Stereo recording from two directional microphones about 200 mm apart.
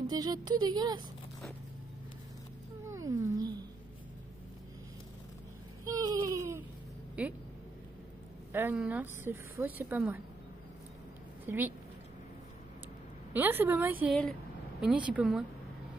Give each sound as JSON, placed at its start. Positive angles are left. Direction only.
{"t": 0.1, "sound": "speech", "side_deg": -20}
{"t": 2.9, "sound": "cat", "side_deg": -15}
{"t": 5.9, "sound": "baby cry", "side_deg": -20}
{"t": 7.2, "sound": "a woman's voice", "side_deg": -5}
{"t": 8.5, "sound": "a woman's voice", "side_deg": -10}
{"t": 11.4, "sound": "speech", "side_deg": -10}
{"t": 13.3, "sound": "a woman's voice", "side_deg": -10}